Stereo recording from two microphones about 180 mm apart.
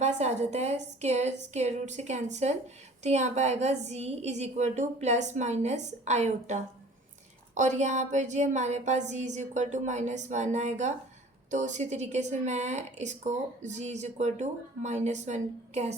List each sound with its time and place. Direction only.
0.0 s speech: 40° right (ahead or behind)